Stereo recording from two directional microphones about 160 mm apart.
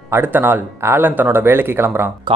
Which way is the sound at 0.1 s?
10° right (ahead or behind).